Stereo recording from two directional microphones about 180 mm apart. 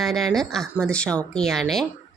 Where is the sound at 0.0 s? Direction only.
Centre (ahead or behind).